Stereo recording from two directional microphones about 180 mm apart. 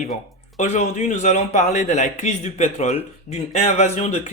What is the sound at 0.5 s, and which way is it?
Speech, 40° left (ahead or behind).